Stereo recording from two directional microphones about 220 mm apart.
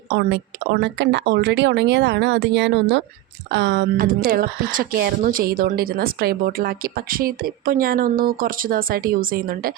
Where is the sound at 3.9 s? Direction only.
40° right (ahead or behind).